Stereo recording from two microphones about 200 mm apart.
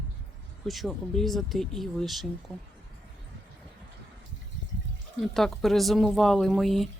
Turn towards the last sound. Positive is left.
turn(degrees=0)  # may be behind; listen again after turning